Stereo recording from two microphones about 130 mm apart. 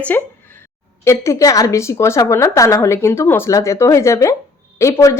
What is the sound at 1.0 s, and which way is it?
Speech, 20° left (ahead or behind).